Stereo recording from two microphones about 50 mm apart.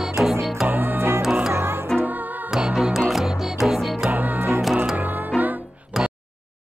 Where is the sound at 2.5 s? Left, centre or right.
Centre.